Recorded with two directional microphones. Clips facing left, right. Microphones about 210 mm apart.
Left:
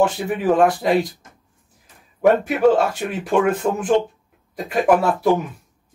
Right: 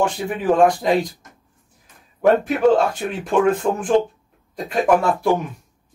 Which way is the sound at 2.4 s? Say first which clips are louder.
Even; 5° left (ahead or behind).